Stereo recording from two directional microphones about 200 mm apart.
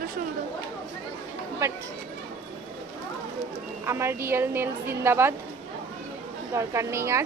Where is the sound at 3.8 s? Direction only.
10° right (ahead or behind).